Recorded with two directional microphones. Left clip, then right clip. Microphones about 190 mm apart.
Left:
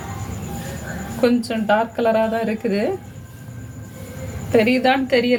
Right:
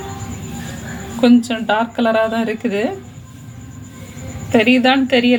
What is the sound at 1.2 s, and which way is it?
Speech, 15° right (ahead or behind).